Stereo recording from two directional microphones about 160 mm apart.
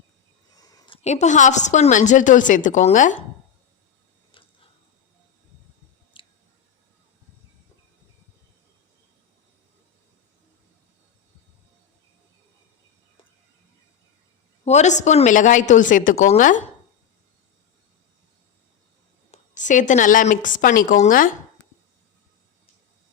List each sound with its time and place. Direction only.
0.5 s a sound: 25° left (ahead or behind)
1.0 s a woman's voice: 45° left (ahead or behind)
4.3 s tick-tock: 35° left (ahead or behind)
6.2 s a sound: 35° left (ahead or behind)
14.6 s a woman's voice: 45° left (ahead or behind)
19.3 s a woman's voice: 50° left (ahead or behind)